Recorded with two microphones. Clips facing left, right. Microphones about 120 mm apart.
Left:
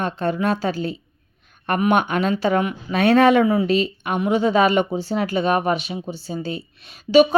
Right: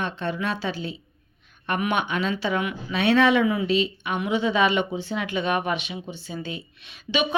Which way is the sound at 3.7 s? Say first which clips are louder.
Left 3 dB; 45° left (ahead or behind).